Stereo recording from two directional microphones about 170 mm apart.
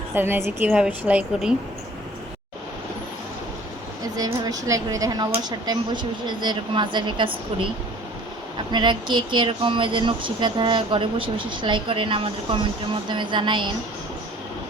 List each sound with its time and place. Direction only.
0.1 s a woman's voice: 10° right (ahead or behind)
4.0 s speech: 20° right (ahead or behind)
8.7 s speech: 25° right (ahead or behind)